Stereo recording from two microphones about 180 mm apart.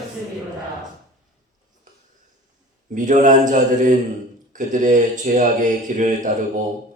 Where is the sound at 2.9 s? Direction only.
45° right (ahead or behind).